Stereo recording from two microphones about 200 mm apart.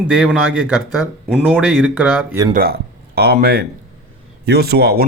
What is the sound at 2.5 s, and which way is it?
Speech, 50° right (ahead or behind).